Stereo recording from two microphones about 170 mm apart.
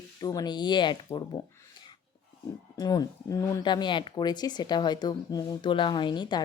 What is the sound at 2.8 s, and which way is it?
Speech, 20° left (ahead or behind).